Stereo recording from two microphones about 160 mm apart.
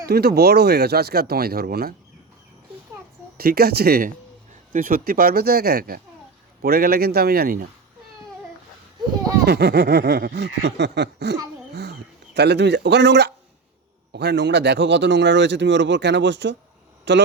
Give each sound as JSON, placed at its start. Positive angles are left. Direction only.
{"t": 0.0, "sound": "speech", "side_deg": -75}
{"t": 3.3, "sound": "speech", "side_deg": -70}
{"t": 4.7, "sound": "speech", "side_deg": -60}
{"t": 9.5, "sound": "speech", "side_deg": -90}
{"t": 11.7, "sound": "a sound", "side_deg": -90}
{"t": 14.1, "sound": "speech", "side_deg": -90}